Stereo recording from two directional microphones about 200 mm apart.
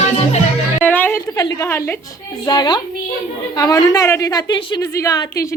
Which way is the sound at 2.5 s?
20° left (ahead or behind).